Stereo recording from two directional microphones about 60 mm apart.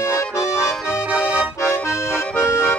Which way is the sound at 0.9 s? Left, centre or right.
Centre.